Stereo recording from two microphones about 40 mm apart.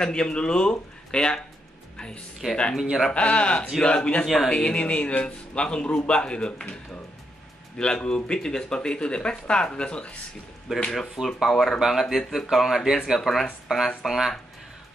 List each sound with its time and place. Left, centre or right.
0.0 s speech: left
2.7 s speech: centre
3.1 s speech: left
7.7 s speech: left
10.7 s speech: centre
11.2 s speech: centre
11.5 s speech: centre
11.9 s speech: centre